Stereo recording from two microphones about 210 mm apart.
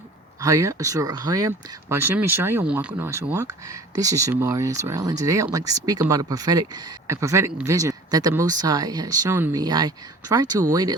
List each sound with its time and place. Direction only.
0.3 s speech: 15° right (ahead or behind)